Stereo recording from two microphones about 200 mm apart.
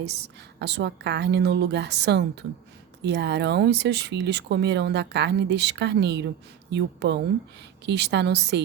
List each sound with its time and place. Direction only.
0.6 s speech: 60° right (ahead or behind)